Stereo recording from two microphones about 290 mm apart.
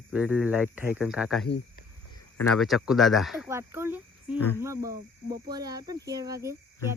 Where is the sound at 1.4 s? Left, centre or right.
Left.